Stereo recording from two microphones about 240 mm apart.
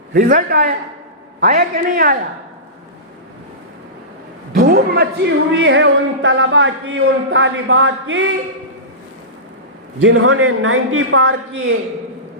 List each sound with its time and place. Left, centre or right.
0.1 s a man's voice: right
4.5 s speech: right
10.0 s a woman's voice: right